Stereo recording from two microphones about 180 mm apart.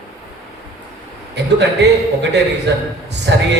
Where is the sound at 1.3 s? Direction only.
70° right (ahead or behind).